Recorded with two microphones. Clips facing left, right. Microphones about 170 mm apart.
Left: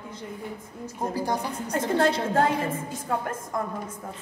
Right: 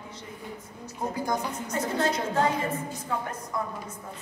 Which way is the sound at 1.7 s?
60° left (ahead or behind).